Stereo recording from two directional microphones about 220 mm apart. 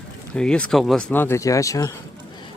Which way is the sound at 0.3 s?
5° left (ahead or behind).